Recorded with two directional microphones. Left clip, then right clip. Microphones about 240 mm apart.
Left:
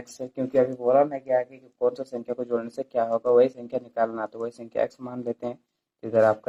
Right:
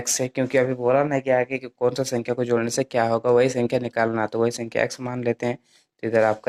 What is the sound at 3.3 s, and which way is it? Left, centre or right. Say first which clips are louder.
Speech: left 1 dB; right.